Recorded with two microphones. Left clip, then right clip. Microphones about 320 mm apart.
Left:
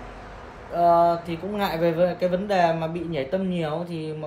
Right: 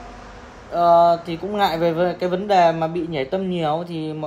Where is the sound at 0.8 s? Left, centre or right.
Right.